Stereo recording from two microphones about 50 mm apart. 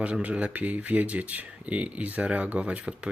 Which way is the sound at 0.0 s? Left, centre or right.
Right.